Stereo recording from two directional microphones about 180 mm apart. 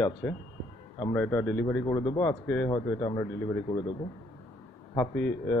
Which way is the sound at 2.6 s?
20° left (ahead or behind).